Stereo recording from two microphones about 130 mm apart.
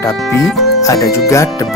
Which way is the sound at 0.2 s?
Centre (ahead or behind).